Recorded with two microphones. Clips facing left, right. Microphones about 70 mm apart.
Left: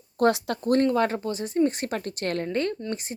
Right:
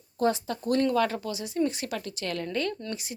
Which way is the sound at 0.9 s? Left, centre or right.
Left.